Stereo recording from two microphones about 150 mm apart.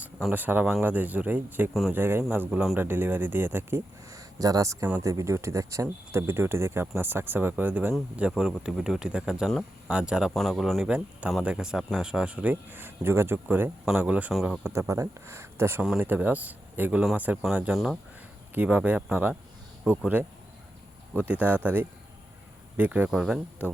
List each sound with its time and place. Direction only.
0.2 s speech: 10° right (ahead or behind)
14.6 s speech: 20° right (ahead or behind)